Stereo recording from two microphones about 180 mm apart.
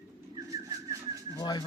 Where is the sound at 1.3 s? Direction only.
25° left (ahead or behind).